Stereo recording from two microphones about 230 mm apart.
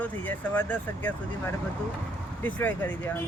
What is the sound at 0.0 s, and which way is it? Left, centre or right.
Speech, centre.